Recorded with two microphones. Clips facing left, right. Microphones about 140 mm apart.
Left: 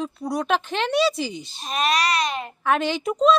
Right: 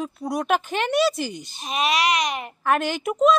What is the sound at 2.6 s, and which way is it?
Speech, centre (ahead or behind).